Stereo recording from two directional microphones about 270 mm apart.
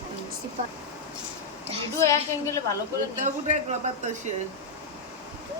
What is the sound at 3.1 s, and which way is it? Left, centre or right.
Speech, right.